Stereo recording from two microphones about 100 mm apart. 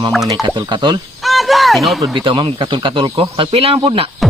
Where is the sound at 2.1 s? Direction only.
50° right (ahead or behind); by 4.1 s 70° right (ahead or behind).